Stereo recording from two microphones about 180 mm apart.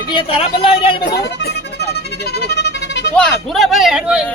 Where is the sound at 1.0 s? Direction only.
70° left (ahead or behind).